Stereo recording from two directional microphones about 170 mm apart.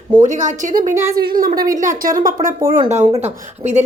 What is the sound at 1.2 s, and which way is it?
A woman's voice, 60° right (ahead or behind).